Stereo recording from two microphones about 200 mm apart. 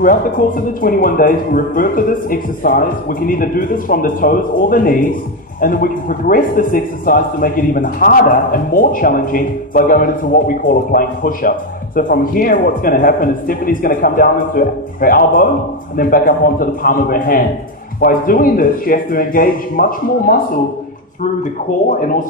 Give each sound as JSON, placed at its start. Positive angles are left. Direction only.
{"t": 0.7, "sound": "a man's voice", "side_deg": 45}